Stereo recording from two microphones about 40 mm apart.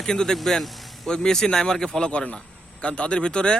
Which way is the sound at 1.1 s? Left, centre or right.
Centre.